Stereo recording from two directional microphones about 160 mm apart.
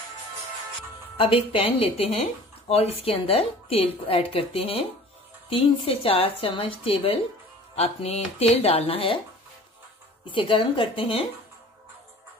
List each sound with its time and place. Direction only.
1.1 s a woman's voice: 35° left (ahead or behind)
10.2 s a woman's voice: 30° left (ahead or behind)